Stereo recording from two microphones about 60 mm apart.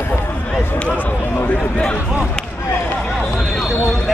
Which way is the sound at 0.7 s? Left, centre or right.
Left.